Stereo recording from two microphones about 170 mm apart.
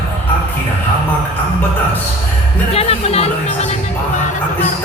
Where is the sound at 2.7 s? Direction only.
35° left (ahead or behind).